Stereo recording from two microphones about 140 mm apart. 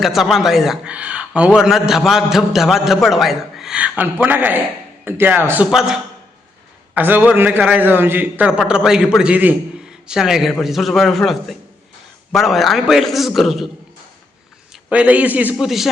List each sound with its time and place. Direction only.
0.0 s a man's voice: centre (ahead or behind)
5.7 s a man's voice: 5° right (ahead or behind)
14.7 s a man's voice: 10° right (ahead or behind)